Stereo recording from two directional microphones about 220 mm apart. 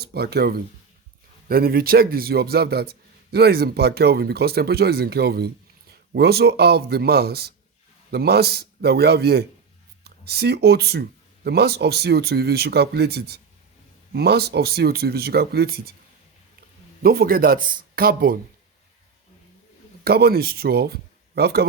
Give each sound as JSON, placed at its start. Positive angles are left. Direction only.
{"t": 0.0, "sound": "a man's voice", "side_deg": -45}
{"t": 17.0, "sound": "a man's voice", "side_deg": -45}
{"t": 20.1, "sound": "speech", "side_deg": -45}